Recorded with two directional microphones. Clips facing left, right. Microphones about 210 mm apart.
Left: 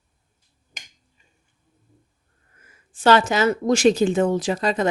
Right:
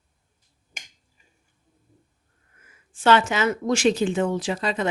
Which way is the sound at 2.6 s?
35° left (ahead or behind).